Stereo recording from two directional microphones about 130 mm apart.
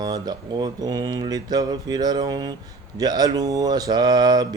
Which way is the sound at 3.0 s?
30° right (ahead or behind).